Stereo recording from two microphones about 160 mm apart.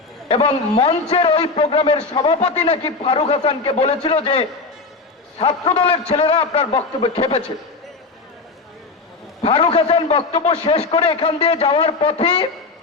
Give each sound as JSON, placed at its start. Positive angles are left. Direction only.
{"t": 0.3, "sound": "a man's voice", "side_deg": 35}
{"t": 9.4, "sound": "a man's voice", "side_deg": 35}